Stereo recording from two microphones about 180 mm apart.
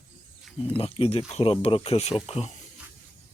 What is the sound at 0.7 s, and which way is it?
Speech, 35° left (ahead or behind).